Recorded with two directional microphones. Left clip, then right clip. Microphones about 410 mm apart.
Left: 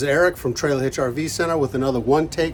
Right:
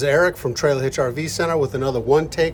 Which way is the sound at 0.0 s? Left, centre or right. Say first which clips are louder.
Right 1 dB; centre.